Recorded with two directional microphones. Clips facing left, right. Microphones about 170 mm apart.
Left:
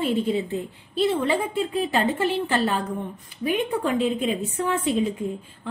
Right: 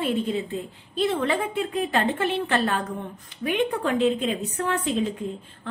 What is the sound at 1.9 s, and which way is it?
A woman's voice, 10° left (ahead or behind).